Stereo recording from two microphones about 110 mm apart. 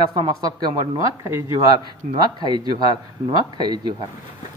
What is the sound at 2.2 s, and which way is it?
A man's voice, 40° right (ahead or behind).